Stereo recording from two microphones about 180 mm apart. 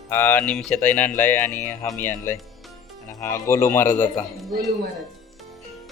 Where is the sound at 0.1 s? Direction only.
10° left (ahead or behind).